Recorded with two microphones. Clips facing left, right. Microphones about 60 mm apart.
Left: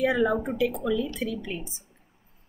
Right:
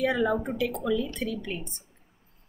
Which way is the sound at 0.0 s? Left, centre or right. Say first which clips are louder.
Left 2 dB; centre.